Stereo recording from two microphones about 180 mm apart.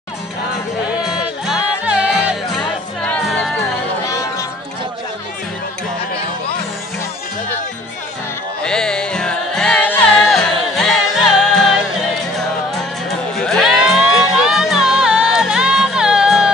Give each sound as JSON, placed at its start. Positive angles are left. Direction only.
{"t": 1.0, "sound": "music", "side_deg": -5}
{"t": 2.6, "sound": "music", "side_deg": 5}
{"t": 4.0, "sound": "music", "side_deg": 20}
{"t": 8.6, "sound": "music", "side_deg": 5}
{"t": 13.4, "sound": "music", "side_deg": 0}